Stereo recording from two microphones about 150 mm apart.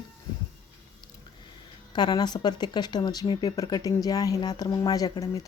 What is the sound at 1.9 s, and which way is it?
Speech, 30° left (ahead or behind).